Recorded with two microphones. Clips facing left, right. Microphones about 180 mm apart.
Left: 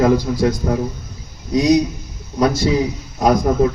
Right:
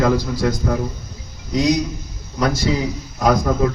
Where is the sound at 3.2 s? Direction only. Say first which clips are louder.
Left 2 dB; 20° left (ahead or behind).